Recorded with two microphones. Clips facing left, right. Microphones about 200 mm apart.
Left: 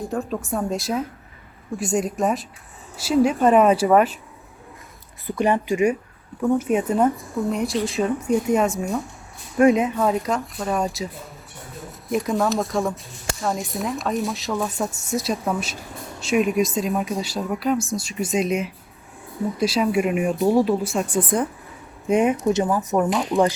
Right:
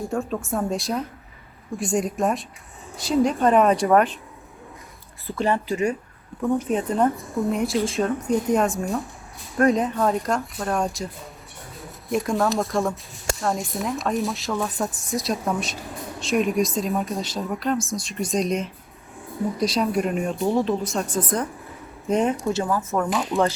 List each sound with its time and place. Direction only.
0.0 s speech: centre (ahead or behind)
5.2 s speech: 15° left (ahead or behind)
21.2 s speech: 30° left (ahead or behind)
22.1 s speech: 10° left (ahead or behind)